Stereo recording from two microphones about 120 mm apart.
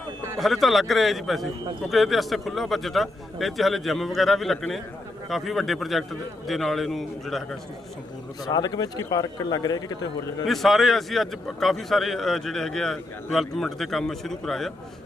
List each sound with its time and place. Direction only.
0.3 s a man's voice: centre (ahead or behind)
8.4 s speech: 35° left (ahead or behind)
10.4 s a man's voice: centre (ahead or behind)